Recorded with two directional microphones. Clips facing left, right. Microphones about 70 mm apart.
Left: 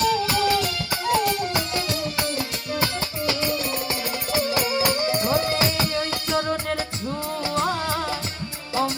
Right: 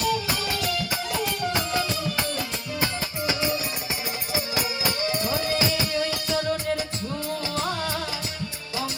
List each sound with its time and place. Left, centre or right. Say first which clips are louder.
0.0 s music: left 5 dB; left
4.5 s music: left 5 dB; left